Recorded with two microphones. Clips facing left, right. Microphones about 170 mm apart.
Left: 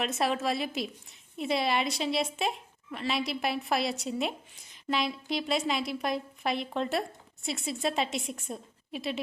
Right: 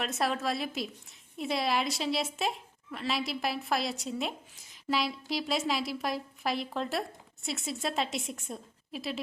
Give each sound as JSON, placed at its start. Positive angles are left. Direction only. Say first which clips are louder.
{"t": 0.0, "sound": "a woman's voice", "louder": "left 2 dB", "side_deg": 0}